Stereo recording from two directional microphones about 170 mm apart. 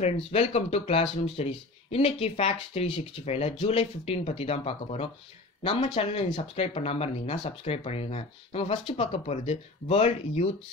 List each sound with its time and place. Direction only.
0.0 s speech: 40° left (ahead or behind)